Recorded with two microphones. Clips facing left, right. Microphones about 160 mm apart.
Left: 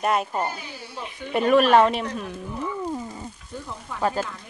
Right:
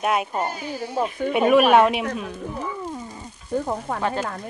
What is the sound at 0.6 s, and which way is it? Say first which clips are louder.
Speech: right 11 dB; 45° right (ahead or behind).